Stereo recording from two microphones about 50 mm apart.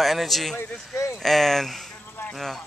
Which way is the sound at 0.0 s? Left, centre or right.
Centre.